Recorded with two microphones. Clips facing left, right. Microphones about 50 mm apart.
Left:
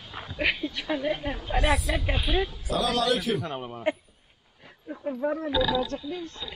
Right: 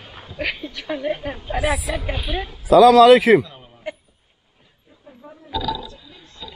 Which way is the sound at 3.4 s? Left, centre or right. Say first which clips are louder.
Left 9 dB; left.